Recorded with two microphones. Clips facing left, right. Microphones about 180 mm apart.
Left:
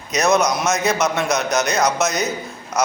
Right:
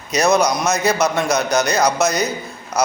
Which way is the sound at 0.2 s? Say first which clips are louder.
Right 1 dB; centre (ahead or behind).